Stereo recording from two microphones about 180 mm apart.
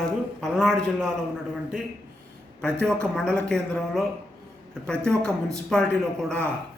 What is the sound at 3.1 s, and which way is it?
A man's voice, 5° left (ahead or behind).